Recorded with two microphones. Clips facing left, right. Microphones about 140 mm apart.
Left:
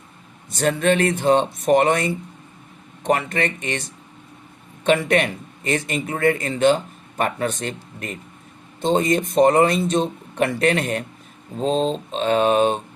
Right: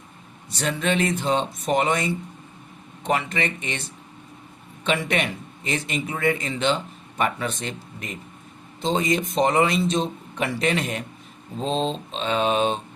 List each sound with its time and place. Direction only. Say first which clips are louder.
0.5 s a man's voice: left 5 dB; 45° left (ahead or behind)
4.8 s a man's voice: left 6 dB; 45° left (ahead or behind)